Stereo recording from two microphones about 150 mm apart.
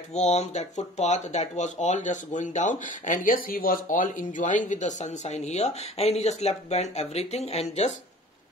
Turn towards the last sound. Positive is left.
turn(degrees=45)  # may be behind; listen again after turning